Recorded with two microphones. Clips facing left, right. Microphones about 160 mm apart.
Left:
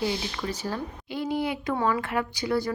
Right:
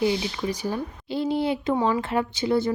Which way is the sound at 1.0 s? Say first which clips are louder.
Right 4 dB; 30° right (ahead or behind).